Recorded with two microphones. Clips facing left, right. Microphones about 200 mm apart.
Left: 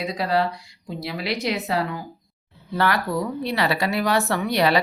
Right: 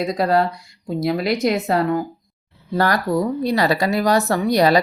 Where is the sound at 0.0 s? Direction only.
45° right (ahead or behind).